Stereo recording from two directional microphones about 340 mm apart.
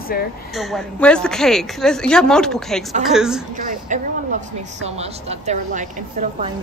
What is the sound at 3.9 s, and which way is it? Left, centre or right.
A woman's voice, right.